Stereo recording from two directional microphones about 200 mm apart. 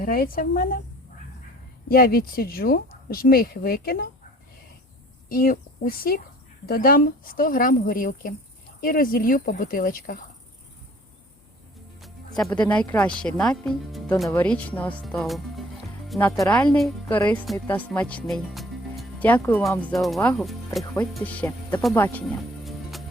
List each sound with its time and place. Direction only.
0.0 s speech: 45° left (ahead or behind)
1.9 s speech: 50° left (ahead or behind)
5.3 s speech: 45° left (ahead or behind)
11.9 s speech: centre (ahead or behind)
22.6 s music: centre (ahead or behind)